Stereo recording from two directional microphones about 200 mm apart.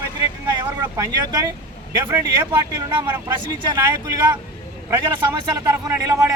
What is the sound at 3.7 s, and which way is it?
Speech, 15° right (ahead or behind).